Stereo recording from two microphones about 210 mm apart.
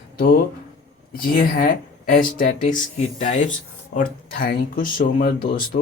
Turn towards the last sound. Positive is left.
turn(degrees=40)  # may be behind; listen again after turning